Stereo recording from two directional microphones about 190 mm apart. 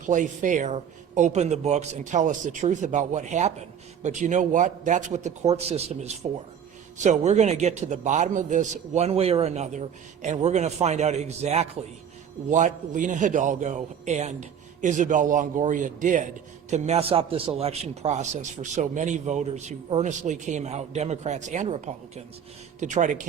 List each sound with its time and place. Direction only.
0.0 s a man's voice: 40° right (ahead or behind)